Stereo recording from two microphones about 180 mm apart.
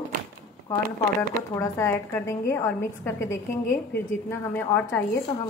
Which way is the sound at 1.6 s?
15° left (ahead or behind).